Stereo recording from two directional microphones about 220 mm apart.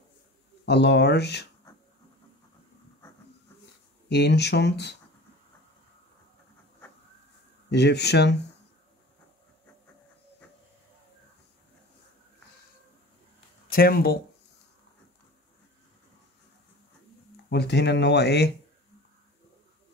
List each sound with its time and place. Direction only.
0.7 s speech: 50° left (ahead or behind)
4.1 s speech: 50° left (ahead or behind)
7.7 s speech: 50° left (ahead or behind)
13.7 s speech: 40° left (ahead or behind)
17.5 s speech: 50° left (ahead or behind)